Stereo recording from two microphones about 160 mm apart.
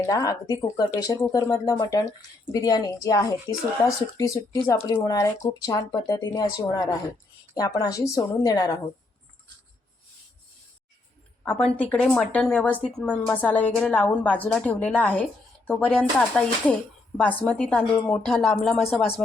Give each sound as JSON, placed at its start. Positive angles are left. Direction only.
{"t": 0.0, "sound": "speech", "side_deg": 20}
{"t": 11.4, "sound": "a woman's voice", "side_deg": 10}